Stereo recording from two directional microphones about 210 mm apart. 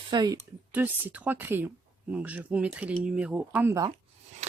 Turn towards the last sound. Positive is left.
turn(degrees=-15)  # may be behind; listen again after turning